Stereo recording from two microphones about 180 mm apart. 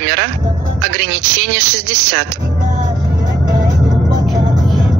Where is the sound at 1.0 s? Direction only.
65° right (ahead or behind).